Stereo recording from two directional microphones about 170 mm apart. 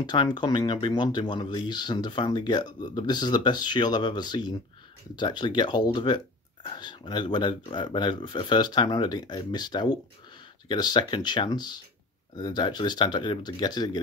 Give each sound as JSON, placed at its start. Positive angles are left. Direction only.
{"t": 0.0, "sound": "speech", "side_deg": 25}